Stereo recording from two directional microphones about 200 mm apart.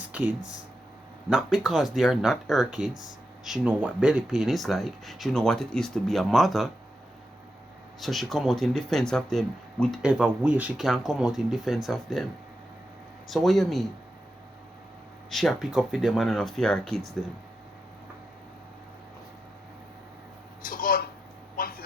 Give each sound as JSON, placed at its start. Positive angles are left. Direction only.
{"t": 0.1, "sound": "a sound", "side_deg": -5}
{"t": 1.3, "sound": "speech", "side_deg": 0}
{"t": 8.0, "sound": "speech", "side_deg": 0}
{"t": 13.2, "sound": "speech", "side_deg": 0}
{"t": 15.3, "sound": "speech", "side_deg": 0}
{"t": 20.6, "sound": "a sound", "side_deg": 45}